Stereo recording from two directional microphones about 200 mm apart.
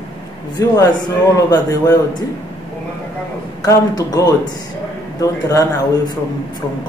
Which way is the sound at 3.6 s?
20° left (ahead or behind).